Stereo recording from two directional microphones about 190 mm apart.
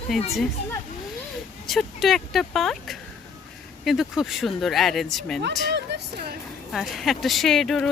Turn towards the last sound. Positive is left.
turn(degrees=0)  # may be behind; listen again after turning